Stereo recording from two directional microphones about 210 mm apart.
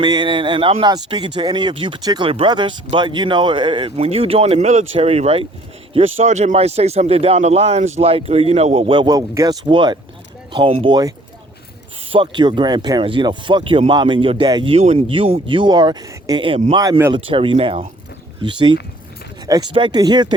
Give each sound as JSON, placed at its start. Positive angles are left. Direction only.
{"t": 0.0, "sound": "speech", "side_deg": -20}
{"t": 16.7, "sound": "speech", "side_deg": -20}